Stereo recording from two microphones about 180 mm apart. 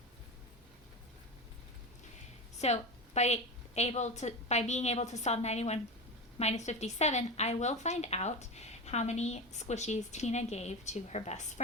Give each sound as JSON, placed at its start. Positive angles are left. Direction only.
{"t": 2.6, "sound": "a woman's voice", "side_deg": 35}